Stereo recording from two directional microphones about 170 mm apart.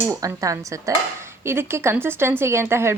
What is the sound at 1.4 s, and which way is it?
Frying, 15° right (ahead or behind).